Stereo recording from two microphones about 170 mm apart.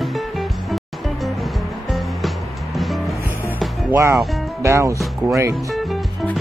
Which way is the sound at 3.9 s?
15° right (ahead or behind).